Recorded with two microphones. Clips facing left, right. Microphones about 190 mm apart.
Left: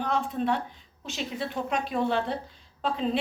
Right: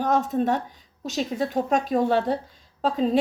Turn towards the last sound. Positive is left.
turn(degrees=-40)  # may be behind; listen again after turning